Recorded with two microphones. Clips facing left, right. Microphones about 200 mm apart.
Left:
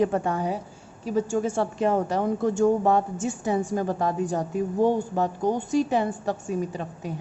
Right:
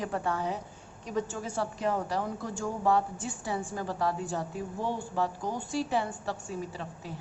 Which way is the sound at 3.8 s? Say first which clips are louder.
Left 6 dB; 50° left (ahead or behind).